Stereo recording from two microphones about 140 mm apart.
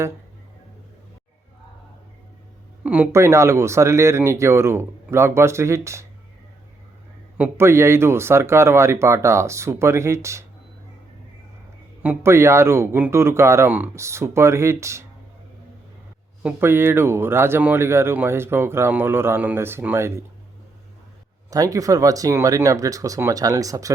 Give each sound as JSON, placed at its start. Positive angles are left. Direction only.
{"t": 2.8, "sound": "speech", "side_deg": -10}
{"t": 7.3, "sound": "speech", "side_deg": -15}
{"t": 12.0, "sound": "speech", "side_deg": -20}
{"t": 16.4, "sound": "speech", "side_deg": -15}
{"t": 21.5, "sound": "speech", "side_deg": -25}